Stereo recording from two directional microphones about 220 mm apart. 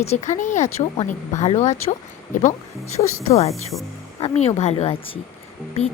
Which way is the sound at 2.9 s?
30° left (ahead or behind).